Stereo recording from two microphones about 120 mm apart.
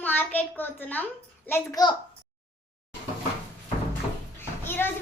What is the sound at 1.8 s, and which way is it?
Speech, 35° left (ahead or behind).